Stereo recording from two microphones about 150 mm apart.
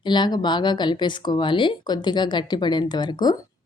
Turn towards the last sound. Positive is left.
turn(degrees=30)  # may be behind; listen again after turning